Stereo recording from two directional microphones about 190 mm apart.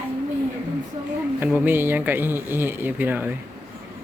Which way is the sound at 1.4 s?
10° right (ahead or behind).